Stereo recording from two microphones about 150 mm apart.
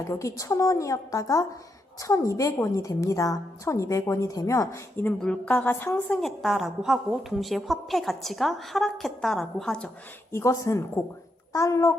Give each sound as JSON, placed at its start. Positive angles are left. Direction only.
{"t": 0.0, "sound": "a woman's voice", "side_deg": 20}
{"t": 6.2, "sound": "a woman's voice", "side_deg": 0}
{"t": 10.3, "sound": "a woman's voice", "side_deg": 20}